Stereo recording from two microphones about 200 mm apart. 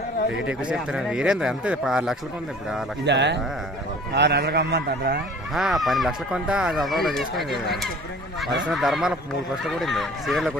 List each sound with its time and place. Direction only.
0.5 s speech: 5° right (ahead or behind)
3.1 s a man's voice: 60° right (ahead or behind)
5.5 s speech: centre (ahead or behind)